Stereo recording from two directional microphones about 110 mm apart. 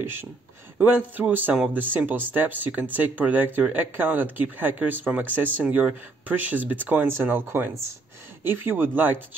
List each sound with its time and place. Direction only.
0.0 s speech: 20° right (ahead or behind)